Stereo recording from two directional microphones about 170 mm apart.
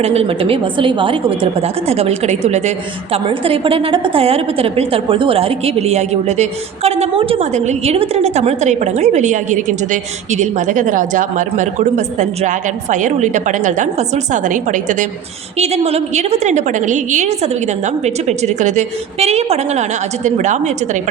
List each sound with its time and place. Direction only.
0.0 s a woman's voice: 35° right (ahead or behind)
15.5 s a woman's voice: 40° right (ahead or behind)